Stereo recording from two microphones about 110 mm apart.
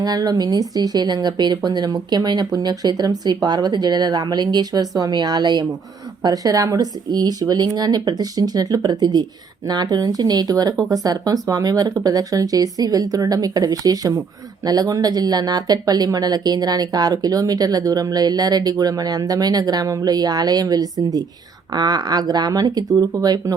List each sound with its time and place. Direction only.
0.0 s speech: 35° right (ahead or behind)